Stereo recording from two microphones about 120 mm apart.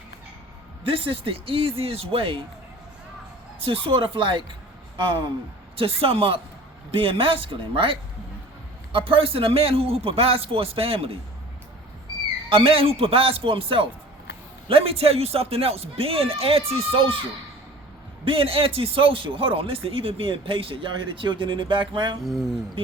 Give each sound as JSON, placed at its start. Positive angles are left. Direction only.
{"t": 0.9, "sound": "speech", "side_deg": -50}
{"t": 3.6, "sound": "speech", "side_deg": -45}
{"t": 12.5, "sound": "speech", "side_deg": -50}
{"t": 18.3, "sound": "speech", "side_deg": -50}
{"t": 22.2, "sound": "speech", "side_deg": 0}